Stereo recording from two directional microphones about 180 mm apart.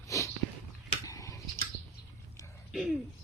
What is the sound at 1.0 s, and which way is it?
Tick-tock, 20° left (ahead or behind).